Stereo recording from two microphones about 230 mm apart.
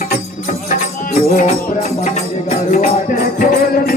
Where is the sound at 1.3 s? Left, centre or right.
Left.